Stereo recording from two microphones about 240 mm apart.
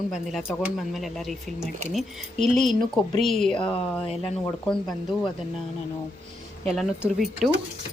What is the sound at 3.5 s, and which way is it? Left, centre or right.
Speech, left.